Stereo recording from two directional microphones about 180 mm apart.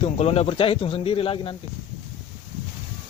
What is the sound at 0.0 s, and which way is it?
Speech, 35° left (ahead or behind).